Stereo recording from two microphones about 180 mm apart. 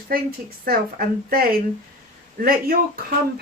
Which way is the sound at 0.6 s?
55° right (ahead or behind).